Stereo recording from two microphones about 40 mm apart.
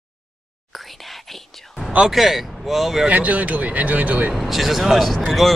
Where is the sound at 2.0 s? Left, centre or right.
Centre.